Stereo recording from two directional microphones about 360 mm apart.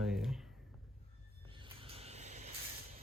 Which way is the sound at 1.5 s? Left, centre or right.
Centre.